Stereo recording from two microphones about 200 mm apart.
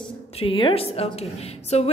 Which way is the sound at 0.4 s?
25° left (ahead or behind).